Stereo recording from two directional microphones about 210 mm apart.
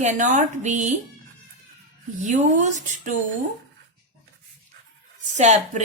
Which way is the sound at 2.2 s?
35° right (ahead or behind).